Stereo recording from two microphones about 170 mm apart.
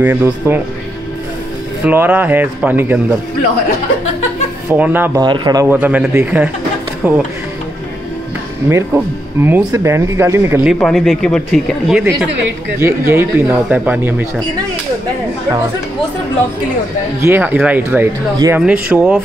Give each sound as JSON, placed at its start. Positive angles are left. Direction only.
{"t": 0.0, "sound": "speech", "side_deg": -10}
{"t": 1.9, "sound": "speech", "side_deg": -10}
{"t": 4.6, "sound": "speech", "side_deg": -10}
{"t": 5.2, "sound": "speech", "side_deg": -25}
{"t": 5.7, "sound": "speech", "side_deg": -10}
{"t": 8.6, "sound": "speech", "side_deg": -15}
{"t": 10.7, "sound": "speech", "side_deg": 0}
{"t": 12.7, "sound": "speech", "side_deg": -15}
{"t": 17.2, "sound": "speech", "side_deg": -10}